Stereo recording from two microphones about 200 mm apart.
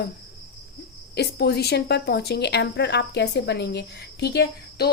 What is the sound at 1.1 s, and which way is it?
Speech, 55° left (ahead or behind).